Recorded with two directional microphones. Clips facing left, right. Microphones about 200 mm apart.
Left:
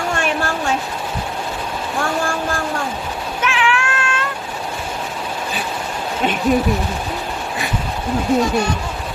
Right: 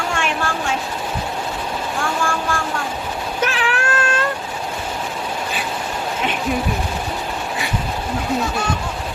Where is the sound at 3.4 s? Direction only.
40° right (ahead or behind).